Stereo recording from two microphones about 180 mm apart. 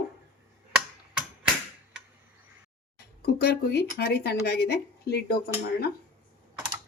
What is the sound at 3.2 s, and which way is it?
Speech, 60° left (ahead or behind).